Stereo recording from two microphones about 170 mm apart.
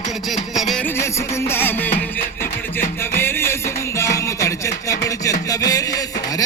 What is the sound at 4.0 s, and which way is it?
Chopping, 20° left (ahead or behind).